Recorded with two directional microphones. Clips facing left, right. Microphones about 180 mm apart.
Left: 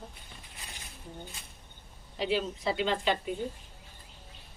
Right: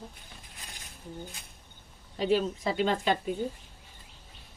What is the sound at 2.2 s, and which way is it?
Speech, 45° right (ahead or behind).